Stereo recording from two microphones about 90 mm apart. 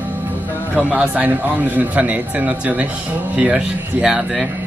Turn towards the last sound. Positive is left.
turn(degrees=-20)  # may be behind; listen again after turning